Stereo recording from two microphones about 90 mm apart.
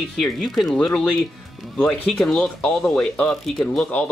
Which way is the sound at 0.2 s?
Centre (ahead or behind).